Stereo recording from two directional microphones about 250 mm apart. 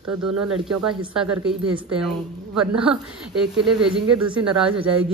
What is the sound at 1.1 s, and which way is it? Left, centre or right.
Speech, centre.